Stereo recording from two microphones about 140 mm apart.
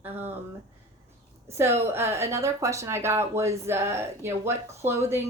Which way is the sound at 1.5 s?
20° right (ahead or behind).